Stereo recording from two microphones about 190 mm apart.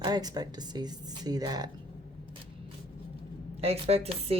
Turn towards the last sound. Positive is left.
turn(degrees=-30)  # may be behind; listen again after turning